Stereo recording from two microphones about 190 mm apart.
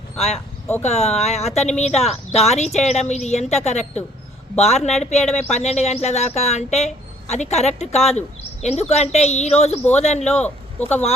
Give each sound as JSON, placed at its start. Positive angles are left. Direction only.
{"t": 0.2, "sound": "speech", "side_deg": 35}
{"t": 10.2, "sound": "speech", "side_deg": 5}